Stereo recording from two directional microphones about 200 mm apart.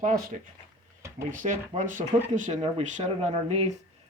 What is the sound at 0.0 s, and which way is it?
Speech, 45° right (ahead or behind).